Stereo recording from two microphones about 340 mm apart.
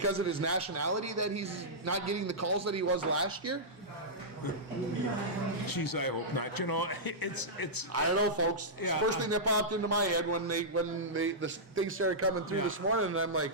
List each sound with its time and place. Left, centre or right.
0.0 s a man's voice: right
5.6 s a man's voice: left
7.9 s a man's voice: right